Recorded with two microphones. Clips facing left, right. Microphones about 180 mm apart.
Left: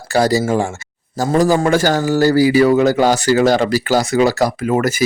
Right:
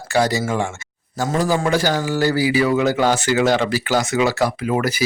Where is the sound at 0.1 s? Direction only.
35° left (ahead or behind).